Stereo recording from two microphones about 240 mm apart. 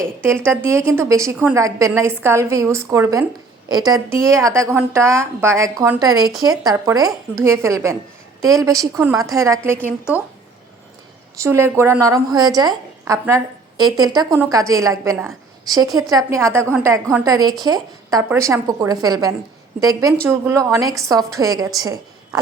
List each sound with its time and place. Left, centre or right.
0.2 s a woman's voice: centre
11.3 s a woman's voice: centre